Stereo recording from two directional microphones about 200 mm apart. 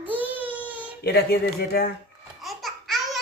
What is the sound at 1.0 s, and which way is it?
Speech, 55° left (ahead or behind).